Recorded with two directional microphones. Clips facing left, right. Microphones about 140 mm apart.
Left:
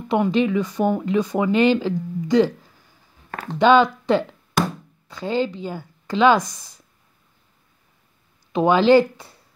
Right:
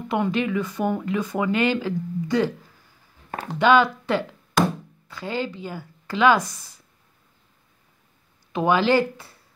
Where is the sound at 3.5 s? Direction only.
20° left (ahead or behind).